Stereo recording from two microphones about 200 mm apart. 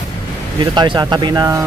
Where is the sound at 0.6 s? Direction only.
25° right (ahead or behind).